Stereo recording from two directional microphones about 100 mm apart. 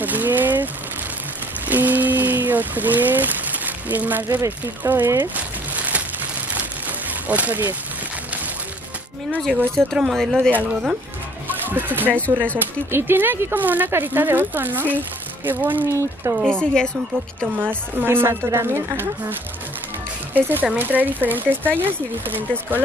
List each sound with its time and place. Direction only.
0.0 s a sound: 15° right (ahead or behind)
1.7 s a sound: 15° right (ahead or behind)
4.5 s speech: 20° right (ahead or behind)
5.3 s a sound: 15° right (ahead or behind)
9.3 s speech: 5° left (ahead or behind)
11.4 s music: 20° right (ahead or behind)
12.1 s a woman's voice: 15° left (ahead or behind)
12.9 s speech: 20° right (ahead or behind)
16.4 s a woman's voice: 10° left (ahead or behind)
17.6 s speech: 20° right (ahead or behind)
20.6 s speech: 15° right (ahead or behind)